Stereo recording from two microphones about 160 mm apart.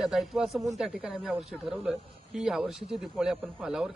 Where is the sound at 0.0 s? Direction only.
Centre (ahead or behind).